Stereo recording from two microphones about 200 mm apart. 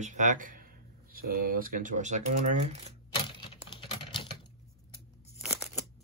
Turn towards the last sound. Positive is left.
turn(degrees=0)  # may be behind; listen again after turning